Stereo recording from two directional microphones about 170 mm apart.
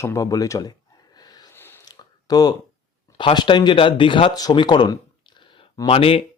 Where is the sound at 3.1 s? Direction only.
25° left (ahead or behind).